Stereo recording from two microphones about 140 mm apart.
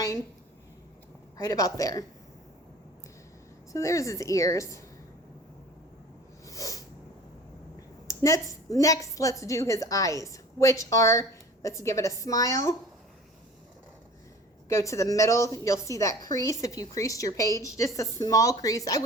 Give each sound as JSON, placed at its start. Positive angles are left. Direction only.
{"t": 1.4, "sound": "a woman's voice", "side_deg": 25}
{"t": 3.7, "sound": "a woman's voice", "side_deg": 20}
{"t": 6.4, "sound": "snort", "side_deg": 25}
{"t": 8.0, "sound": "a woman's voice", "side_deg": 25}
{"t": 14.7, "sound": "a woman's voice", "side_deg": 20}